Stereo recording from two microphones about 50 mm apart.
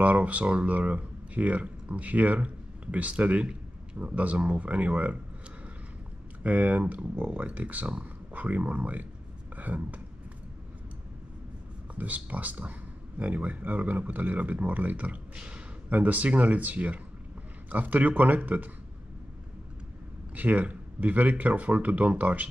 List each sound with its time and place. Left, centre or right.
0.0 s speech: right
6.4 s speech: right
11.9 s speech: right
20.3 s speech: right